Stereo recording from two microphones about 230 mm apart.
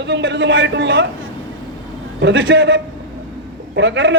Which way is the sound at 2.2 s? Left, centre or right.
Right.